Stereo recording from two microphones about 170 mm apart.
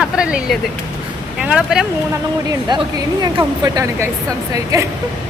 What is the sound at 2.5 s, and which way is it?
Speech, 25° right (ahead or behind).